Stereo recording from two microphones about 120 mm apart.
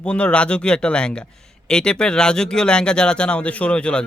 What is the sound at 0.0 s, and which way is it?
Speech, 10° left (ahead or behind).